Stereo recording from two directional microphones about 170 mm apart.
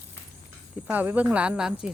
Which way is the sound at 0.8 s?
10° right (ahead or behind).